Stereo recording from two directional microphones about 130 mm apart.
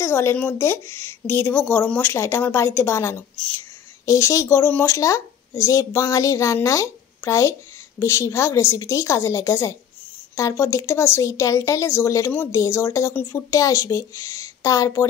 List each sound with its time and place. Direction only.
0.0 s a woman's voice: 20° left (ahead or behind)